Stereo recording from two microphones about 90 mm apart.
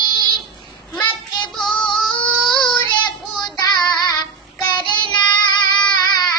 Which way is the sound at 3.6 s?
50° left (ahead or behind).